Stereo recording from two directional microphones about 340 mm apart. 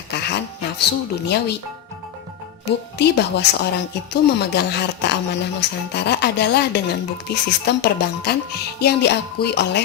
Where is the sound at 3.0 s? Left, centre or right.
Left.